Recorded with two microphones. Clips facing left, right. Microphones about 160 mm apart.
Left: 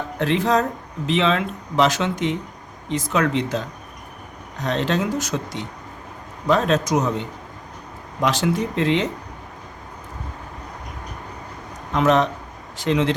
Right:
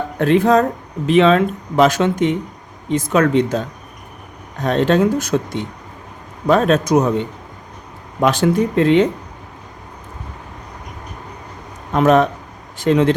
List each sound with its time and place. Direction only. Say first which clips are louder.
0.2 s speech: right 6 dB; 50° right (ahead or behind)
4.6 s speech: right 7 dB; 50° right (ahead or behind)
8.2 s speech: right 6 dB; 50° right (ahead or behind)
11.9 s speech: right 5 dB; 50° right (ahead or behind)